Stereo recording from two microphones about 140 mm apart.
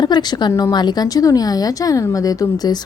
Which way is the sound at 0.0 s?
30° left (ahead or behind).